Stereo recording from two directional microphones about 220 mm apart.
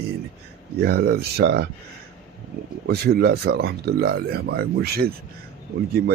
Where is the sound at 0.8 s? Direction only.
45° right (ahead or behind).